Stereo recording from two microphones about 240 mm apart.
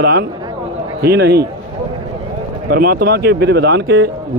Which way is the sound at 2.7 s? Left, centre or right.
Right.